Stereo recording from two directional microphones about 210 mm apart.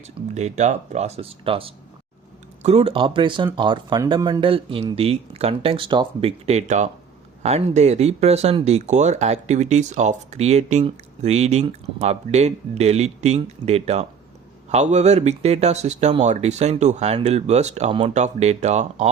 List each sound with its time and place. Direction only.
0.3 s speech: 35° right (ahead or behind)